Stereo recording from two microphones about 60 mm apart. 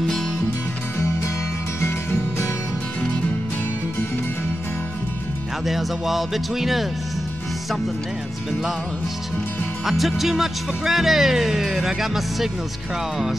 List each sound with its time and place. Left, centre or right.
1.8 s music: left
5.7 s speech: centre
9.8 s speech: centre